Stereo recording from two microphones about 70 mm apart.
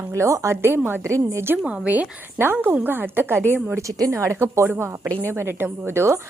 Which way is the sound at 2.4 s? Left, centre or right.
Right.